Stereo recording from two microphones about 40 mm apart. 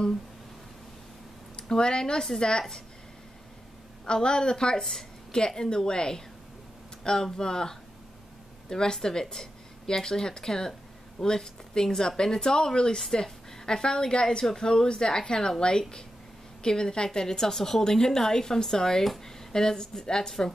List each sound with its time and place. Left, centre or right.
1.6 s a woman's voice: centre
4.0 s a woman's voice: left
16.6 s a woman's voice: centre